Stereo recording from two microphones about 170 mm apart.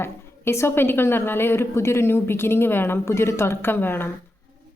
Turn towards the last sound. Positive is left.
turn(degrees=10)  # may be behind; listen again after turning